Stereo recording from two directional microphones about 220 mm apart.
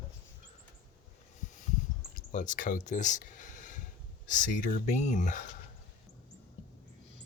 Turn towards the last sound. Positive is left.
turn(degrees=35)  # may be behind; listen again after turning